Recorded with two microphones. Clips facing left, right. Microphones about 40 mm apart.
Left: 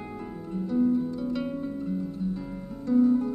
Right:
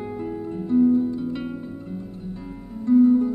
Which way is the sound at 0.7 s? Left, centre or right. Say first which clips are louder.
Right 7 dB; right.